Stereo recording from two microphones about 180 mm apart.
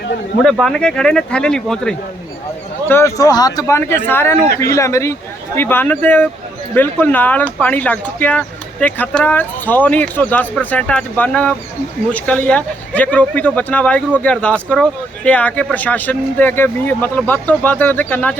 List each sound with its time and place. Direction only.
0.4 s speech: centre (ahead or behind)